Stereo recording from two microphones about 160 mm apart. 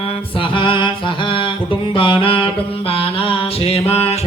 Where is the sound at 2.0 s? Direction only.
35° left (ahead or behind).